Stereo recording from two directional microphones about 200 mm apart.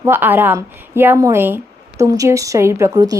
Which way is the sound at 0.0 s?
10° right (ahead or behind).